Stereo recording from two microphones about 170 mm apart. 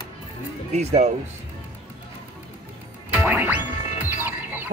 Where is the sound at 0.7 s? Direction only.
40° right (ahead or behind).